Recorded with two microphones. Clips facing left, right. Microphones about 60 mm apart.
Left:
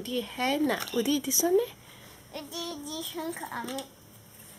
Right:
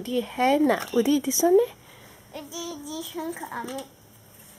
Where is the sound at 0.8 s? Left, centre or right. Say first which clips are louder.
Right 6 dB; centre.